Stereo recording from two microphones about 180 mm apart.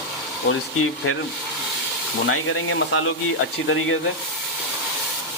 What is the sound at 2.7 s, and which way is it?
Speech, 90° left.